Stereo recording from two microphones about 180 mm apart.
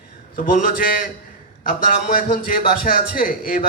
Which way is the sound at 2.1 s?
55° left (ahead or behind).